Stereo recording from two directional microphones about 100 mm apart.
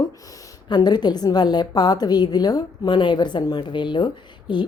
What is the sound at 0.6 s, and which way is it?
A woman's voice, 45° left (ahead or behind).